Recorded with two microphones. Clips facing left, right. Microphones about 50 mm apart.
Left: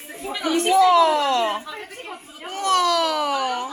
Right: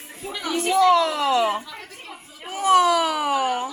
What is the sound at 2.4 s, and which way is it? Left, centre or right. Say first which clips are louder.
Speech: right 3 dB; centre.